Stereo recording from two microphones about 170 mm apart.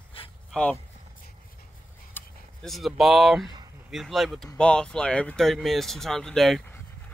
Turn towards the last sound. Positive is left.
turn(degrees=0)  # may be behind; listen again after turning